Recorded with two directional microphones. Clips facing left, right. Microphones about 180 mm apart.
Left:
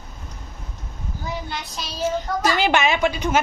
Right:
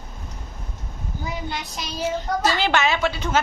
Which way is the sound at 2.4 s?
15° left (ahead or behind).